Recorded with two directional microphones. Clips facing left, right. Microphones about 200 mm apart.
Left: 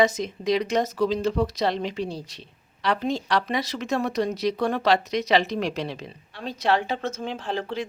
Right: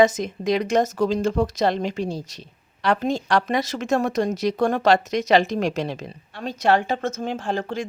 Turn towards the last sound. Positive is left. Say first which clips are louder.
# right 3 dB
turn(degrees=-45)  # may be behind; listen again after turning